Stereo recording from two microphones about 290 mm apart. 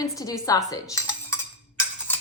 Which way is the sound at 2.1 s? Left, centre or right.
Centre.